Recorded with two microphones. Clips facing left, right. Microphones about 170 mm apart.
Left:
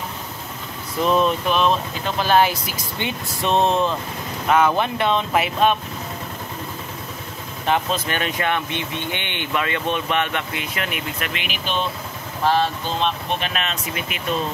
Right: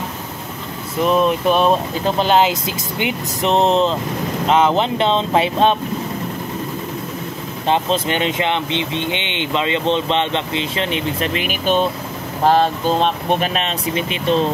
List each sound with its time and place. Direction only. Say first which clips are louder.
1.0 s a sound: right 3 dB; 5° right (ahead or behind)
1.5 s speech: right 4 dB; 40° right (ahead or behind)
2.1 s speech: right 1 dB; 20° right (ahead or behind)
7.6 s speech: right 4 dB; 20° right (ahead or behind)